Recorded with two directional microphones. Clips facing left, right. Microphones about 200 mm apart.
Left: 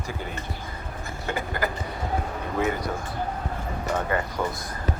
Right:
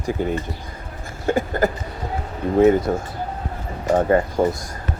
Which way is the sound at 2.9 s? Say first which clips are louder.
Right 6 dB; 45° right (ahead or behind).